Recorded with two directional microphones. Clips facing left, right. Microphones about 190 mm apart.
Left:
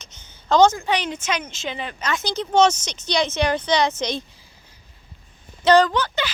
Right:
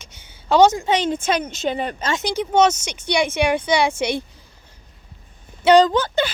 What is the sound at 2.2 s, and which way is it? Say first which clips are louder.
A woman's voice: right 1 dB; 10° right (ahead or behind).